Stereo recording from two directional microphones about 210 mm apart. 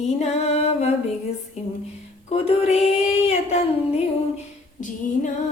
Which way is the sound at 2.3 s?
30° left (ahead or behind).